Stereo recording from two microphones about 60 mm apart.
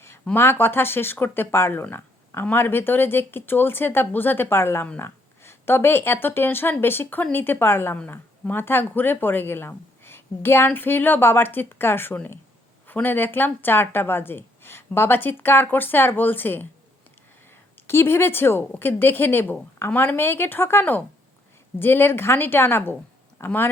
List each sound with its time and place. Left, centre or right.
0.3 s a woman's voice: left
17.8 s a woman's voice: left